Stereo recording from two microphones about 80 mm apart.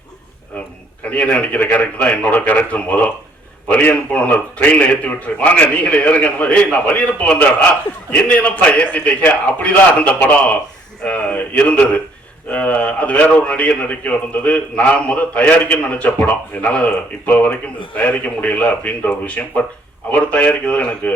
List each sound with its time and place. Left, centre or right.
0.5 s a man's voice: centre